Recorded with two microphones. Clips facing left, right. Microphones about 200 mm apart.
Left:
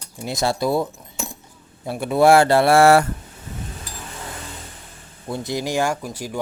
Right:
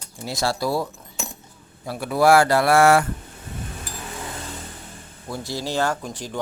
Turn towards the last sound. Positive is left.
turn(degrees=10)  # may be behind; listen again after turning